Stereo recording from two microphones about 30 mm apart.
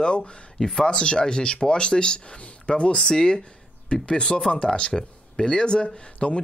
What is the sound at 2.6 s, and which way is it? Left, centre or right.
Speech, left.